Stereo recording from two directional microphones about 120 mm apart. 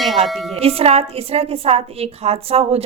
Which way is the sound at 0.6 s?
55° right (ahead or behind).